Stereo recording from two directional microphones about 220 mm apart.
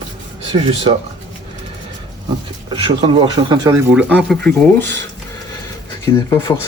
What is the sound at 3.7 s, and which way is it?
Speech, 5° right (ahead or behind).